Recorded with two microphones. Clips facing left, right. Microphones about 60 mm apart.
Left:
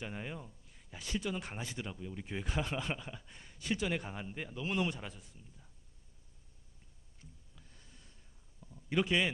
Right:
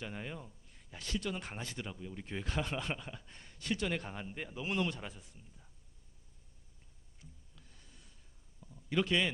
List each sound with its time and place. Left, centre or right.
0.0 s a man's voice: centre
8.9 s a man's voice: centre